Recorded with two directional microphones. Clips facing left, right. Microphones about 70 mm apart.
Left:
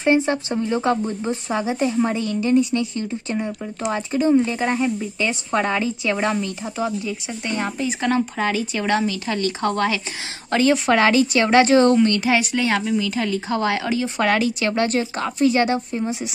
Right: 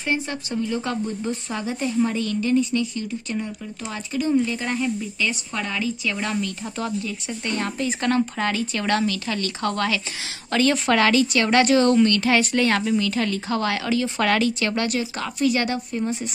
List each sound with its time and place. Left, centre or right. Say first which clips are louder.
0.0 s speech: left 8 dB; left